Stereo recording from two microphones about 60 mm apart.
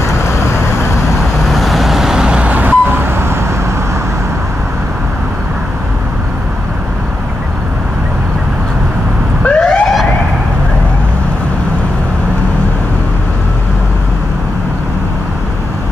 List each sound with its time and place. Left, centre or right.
1.4 s vehicle: centre
2.5 s vehicle: right
9.4 s emergency vehicle: centre